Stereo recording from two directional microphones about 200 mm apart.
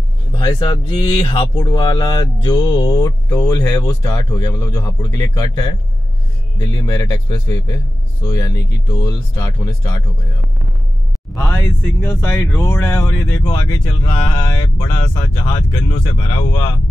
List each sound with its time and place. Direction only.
0.3 s speech: 20° left (ahead or behind)
12.0 s speech: 10° left (ahead or behind)